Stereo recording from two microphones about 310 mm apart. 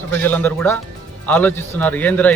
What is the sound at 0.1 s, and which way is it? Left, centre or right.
Speech, centre.